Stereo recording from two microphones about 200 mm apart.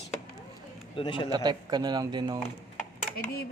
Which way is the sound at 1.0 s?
25° left (ahead or behind).